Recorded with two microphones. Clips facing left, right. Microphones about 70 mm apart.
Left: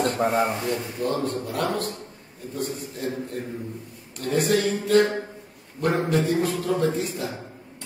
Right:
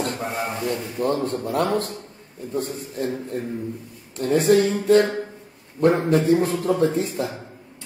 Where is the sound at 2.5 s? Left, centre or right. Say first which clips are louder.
Right 4 dB; right.